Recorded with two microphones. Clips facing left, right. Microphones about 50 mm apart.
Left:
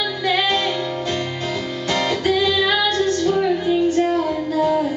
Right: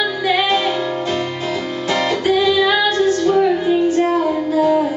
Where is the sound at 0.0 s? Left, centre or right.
Centre.